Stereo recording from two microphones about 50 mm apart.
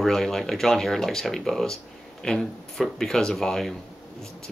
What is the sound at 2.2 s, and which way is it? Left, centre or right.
Speech, centre.